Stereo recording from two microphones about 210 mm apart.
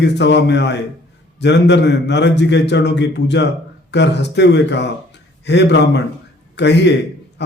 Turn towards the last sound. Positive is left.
turn(degrees=55)  # may be behind; listen again after turning